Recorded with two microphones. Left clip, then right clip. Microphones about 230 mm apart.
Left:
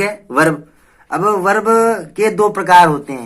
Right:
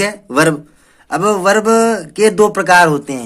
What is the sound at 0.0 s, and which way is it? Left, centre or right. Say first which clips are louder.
Speech: right 1 dB; right.